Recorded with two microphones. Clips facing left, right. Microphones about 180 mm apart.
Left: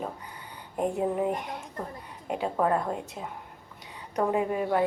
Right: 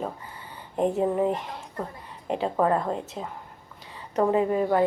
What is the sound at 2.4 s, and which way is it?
Speech, 5° left (ahead or behind).